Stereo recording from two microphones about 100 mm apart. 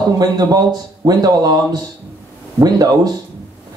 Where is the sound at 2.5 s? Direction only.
40° right (ahead or behind).